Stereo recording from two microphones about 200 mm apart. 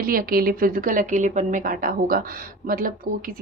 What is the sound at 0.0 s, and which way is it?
Speech, 45° right (ahead or behind).